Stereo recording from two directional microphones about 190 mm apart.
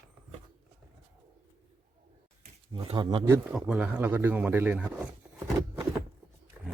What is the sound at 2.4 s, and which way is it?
Speech, 30° right (ahead or behind).